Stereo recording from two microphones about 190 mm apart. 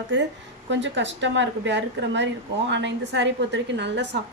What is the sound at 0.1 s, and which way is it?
A woman's voice, 70° right (ahead or behind).